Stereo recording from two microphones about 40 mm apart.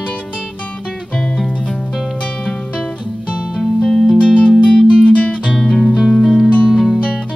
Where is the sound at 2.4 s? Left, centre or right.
Left.